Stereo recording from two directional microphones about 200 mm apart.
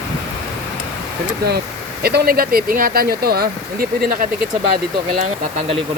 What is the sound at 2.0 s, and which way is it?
Speech, 50° right (ahead or behind).